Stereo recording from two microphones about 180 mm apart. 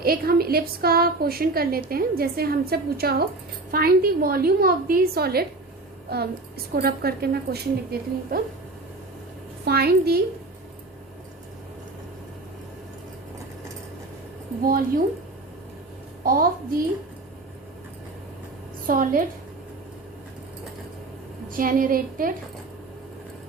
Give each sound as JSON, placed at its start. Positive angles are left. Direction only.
{"t": 0.0, "sound": "a woman's voice", "side_deg": -55}
{"t": 9.6, "sound": "a woman's voice", "side_deg": -60}
{"t": 14.6, "sound": "a woman's voice", "side_deg": -55}
{"t": 16.2, "sound": "a woman's voice", "side_deg": -50}
{"t": 18.9, "sound": "a woman's voice", "side_deg": -50}
{"t": 21.5, "sound": "a woman's voice", "side_deg": -50}